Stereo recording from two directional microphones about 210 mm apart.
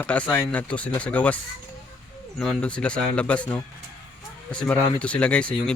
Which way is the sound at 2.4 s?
5° left (ahead or behind).